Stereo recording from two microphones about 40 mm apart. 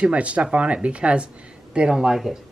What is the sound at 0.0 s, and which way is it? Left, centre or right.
Speech, right.